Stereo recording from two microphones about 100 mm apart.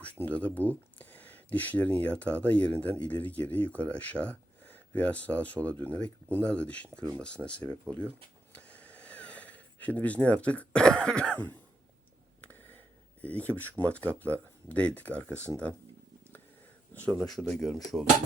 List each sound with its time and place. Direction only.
0.0 s speech: 15° left (ahead or behind)
8.5 s a sound: 15° left (ahead or behind)
12.4 s a sound: 15° left (ahead or behind)
13.2 s speech: 15° left (ahead or behind)
16.9 s speech: 15° left (ahead or behind)
17.2 s speech: 5° left (ahead or behind)